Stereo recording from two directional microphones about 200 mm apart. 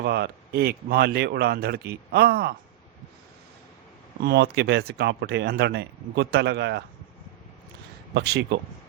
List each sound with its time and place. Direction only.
0.0 s speech: 55° right (ahead or behind)
4.2 s speech: 55° right (ahead or behind)
8.1 s speech: 55° right (ahead or behind)